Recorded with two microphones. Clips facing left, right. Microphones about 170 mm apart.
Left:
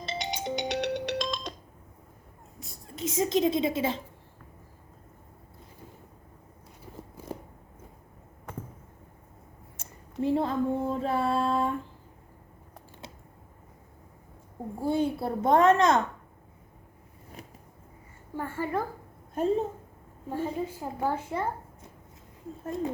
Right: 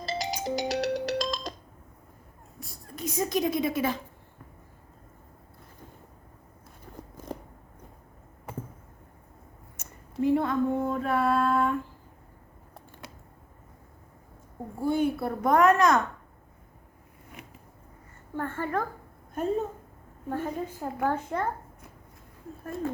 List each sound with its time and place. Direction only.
0.0 s music: centre (ahead or behind)
2.9 s a woman's voice: 25° left (ahead or behind)
6.9 s scissors: 5° left (ahead or behind)
9.7 s a sound: 30° left (ahead or behind)
13.0 s a sound: 25° left (ahead or behind)
14.8 s a woman's voice: 25° left (ahead or behind)
17.4 s a sound: 35° left (ahead or behind)
18.3 s a woman's voice: 10° left (ahead or behind)
20.3 s a woman's voice: 10° left (ahead or behind)
22.6 s speech: 20° left (ahead or behind)